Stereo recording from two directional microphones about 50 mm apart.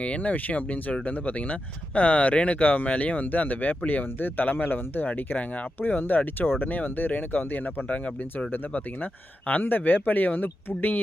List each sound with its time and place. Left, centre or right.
0.0 s speech: left
8.5 s speech: left